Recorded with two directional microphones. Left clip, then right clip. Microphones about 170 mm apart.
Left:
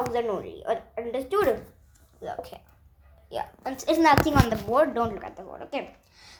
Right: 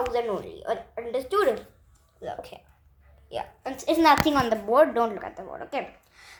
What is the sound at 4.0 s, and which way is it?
A woman's voice, 35° right (ahead or behind).